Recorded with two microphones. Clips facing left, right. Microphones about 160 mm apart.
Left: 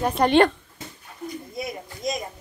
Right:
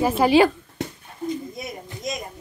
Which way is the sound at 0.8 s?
75° right (ahead or behind).